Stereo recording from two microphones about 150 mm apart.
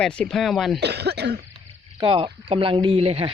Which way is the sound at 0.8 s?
90° right.